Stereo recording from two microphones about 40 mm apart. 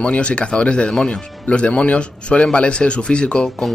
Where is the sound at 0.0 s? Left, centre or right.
Left.